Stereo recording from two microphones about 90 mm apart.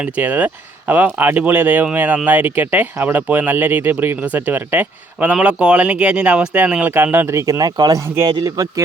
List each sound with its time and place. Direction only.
0.0 s speech: 20° right (ahead or behind)
7.6 s speech: 45° right (ahead or behind)
8.0 s speech: 30° right (ahead or behind)
8.4 s speech: 40° right (ahead or behind)